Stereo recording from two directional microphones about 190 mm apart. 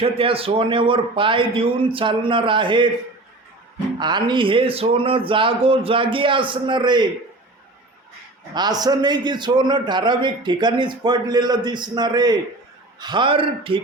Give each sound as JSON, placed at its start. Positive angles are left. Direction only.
{"t": 0.0, "sound": "a man's voice", "side_deg": -30}
{"t": 4.0, "sound": "a man's voice", "side_deg": -25}
{"t": 8.5, "sound": "a man's voice", "side_deg": -20}